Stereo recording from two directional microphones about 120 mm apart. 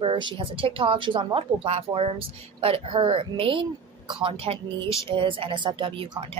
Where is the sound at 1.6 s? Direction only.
55° right (ahead or behind); by 6.2 s 40° right (ahead or behind).